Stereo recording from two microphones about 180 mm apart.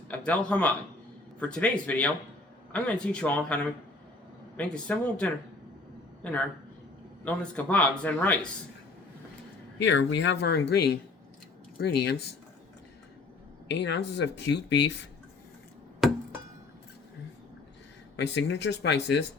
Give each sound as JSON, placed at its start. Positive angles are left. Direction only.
{"t": 0.1, "sound": "speech", "side_deg": 5}
{"t": 7.3, "sound": "speech", "side_deg": 5}
{"t": 9.8, "sound": "speech", "side_deg": 80}
{"t": 13.7, "sound": "speech", "side_deg": 70}
{"t": 16.0, "sound": "chop", "side_deg": 0}
{"t": 18.2, "sound": "speech", "side_deg": 70}